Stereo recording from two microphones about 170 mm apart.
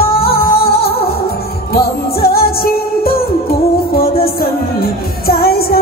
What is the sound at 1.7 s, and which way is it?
Music, 65° left (ahead or behind).